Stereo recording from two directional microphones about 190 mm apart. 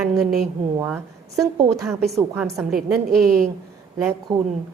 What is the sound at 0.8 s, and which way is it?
Speech, 10° right (ahead or behind).